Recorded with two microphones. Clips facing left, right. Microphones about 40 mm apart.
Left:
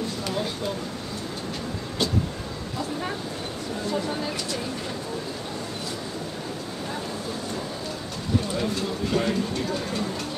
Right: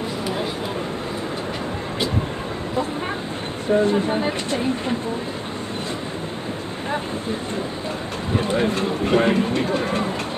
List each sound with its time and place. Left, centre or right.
3.6 s speech: right
8.4 s speech: right